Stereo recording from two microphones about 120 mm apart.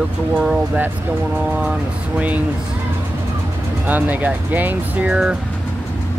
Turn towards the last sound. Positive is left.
turn(degrees=-10)  # may be behind; listen again after turning